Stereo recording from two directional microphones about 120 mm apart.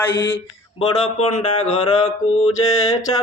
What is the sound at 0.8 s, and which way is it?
Speech, 70° left (ahead or behind).